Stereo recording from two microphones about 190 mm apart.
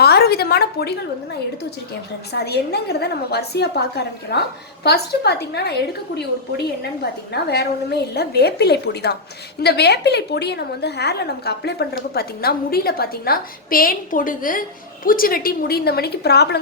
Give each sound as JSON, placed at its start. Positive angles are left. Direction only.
{"t": 0.0, "sound": "a woman's voice", "side_deg": 55}
{"t": 2.4, "sound": "a woman's voice", "side_deg": 60}
{"t": 7.0, "sound": "a woman's voice", "side_deg": 60}